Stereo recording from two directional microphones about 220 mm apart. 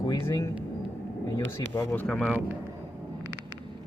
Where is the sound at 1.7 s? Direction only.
10° left (ahead or behind).